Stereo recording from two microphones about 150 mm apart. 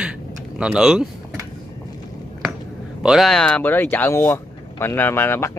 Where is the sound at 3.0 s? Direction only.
Centre (ahead or behind); by 5.5 s 15° left (ahead or behind).